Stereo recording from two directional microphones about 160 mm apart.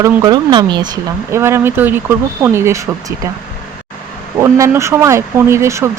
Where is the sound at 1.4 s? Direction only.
15° right (ahead or behind).